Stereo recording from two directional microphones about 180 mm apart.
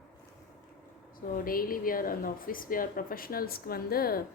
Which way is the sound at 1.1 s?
50° left (ahead or behind).